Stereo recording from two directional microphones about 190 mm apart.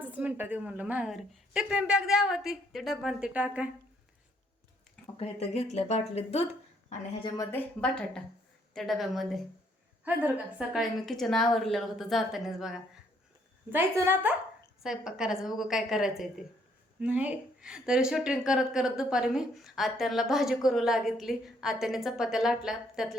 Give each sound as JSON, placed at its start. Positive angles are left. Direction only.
{"t": 0.0, "sound": "a woman's voice", "side_deg": -10}
{"t": 5.2, "sound": "speech", "side_deg": 35}
{"t": 7.3, "sound": "a woman's voice", "side_deg": 15}
{"t": 7.8, "sound": "a woman's voice", "side_deg": 5}